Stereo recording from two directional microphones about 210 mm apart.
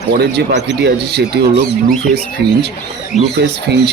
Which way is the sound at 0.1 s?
50° right (ahead or behind).